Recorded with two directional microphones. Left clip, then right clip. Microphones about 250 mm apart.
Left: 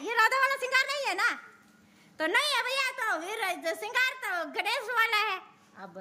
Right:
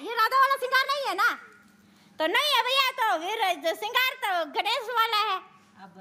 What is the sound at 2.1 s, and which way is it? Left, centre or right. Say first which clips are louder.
A woman's voice: right 3 dB; centre.